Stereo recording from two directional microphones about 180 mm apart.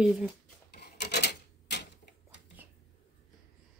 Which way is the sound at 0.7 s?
65° left (ahead or behind).